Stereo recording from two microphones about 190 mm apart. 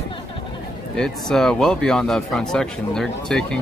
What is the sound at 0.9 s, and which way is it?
Speech, 5° left (ahead or behind).